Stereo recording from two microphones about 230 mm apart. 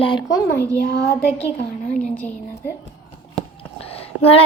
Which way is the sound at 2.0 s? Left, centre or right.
Centre.